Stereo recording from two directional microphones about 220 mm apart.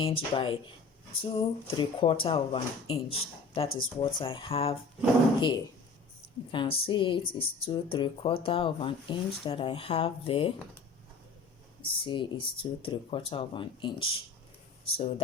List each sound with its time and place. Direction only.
0.0 s speech: 25° left (ahead or behind)
6.5 s speech: 25° left (ahead or behind)
11.8 s speech: 25° left (ahead or behind)